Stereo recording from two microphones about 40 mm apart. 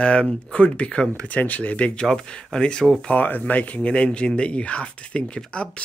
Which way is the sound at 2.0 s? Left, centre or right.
Left.